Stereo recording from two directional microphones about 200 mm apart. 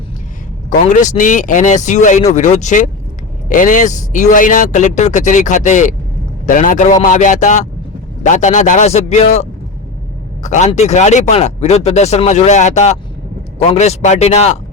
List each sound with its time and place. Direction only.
0.7 s speech: 40° left (ahead or behind)